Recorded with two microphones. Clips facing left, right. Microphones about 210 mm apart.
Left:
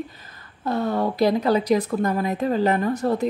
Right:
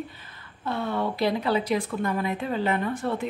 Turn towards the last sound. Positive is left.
turn(degrees=40)  # may be behind; listen again after turning